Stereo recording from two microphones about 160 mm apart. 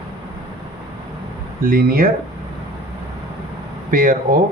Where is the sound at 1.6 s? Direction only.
65° right (ahead or behind).